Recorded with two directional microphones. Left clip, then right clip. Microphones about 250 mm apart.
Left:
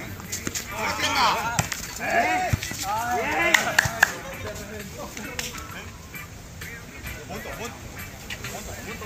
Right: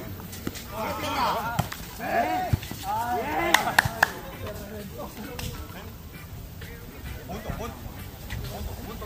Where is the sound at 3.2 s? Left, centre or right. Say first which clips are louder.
Left 3 dB; centre.